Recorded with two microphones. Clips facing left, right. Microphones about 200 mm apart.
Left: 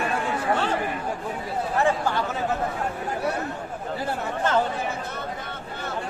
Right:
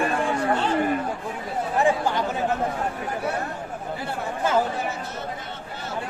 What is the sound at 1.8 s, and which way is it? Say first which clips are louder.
Speech: right 2 dB; 15° right (ahead or behind).